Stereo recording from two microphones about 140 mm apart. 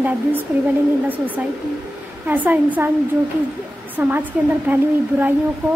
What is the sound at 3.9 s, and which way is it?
A woman's voice, 15° right (ahead or behind).